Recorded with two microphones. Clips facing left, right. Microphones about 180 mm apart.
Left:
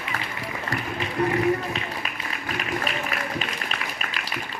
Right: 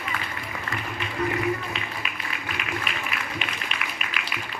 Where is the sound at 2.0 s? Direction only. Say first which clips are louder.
Left 1 dB; 40° left (ahead or behind).